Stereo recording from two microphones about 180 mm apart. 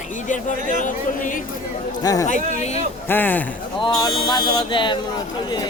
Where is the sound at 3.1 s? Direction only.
10° left (ahead or behind).